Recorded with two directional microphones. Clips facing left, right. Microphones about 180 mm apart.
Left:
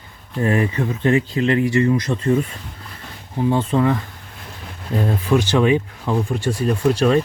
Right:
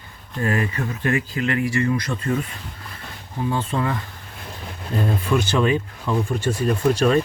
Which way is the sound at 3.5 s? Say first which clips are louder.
Left 6 dB; 30° left (ahead or behind).